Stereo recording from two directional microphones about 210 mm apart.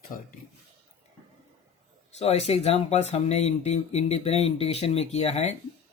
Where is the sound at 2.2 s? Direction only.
30° left (ahead or behind).